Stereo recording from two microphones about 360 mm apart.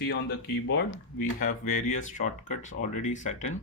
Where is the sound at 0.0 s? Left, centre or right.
Left.